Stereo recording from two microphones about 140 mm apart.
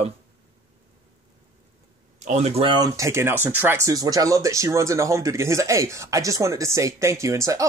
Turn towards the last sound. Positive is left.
turn(degrees=-25)  # may be behind; listen again after turning